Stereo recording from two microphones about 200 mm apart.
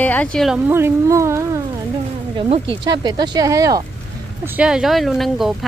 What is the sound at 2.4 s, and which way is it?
Speech, 25° right (ahead or behind).